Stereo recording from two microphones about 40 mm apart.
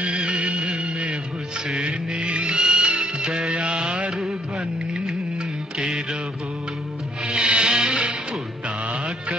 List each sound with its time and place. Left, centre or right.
0.0 s music of bollywood: right
1.7 s music of bollywood: right
7.2 s music: right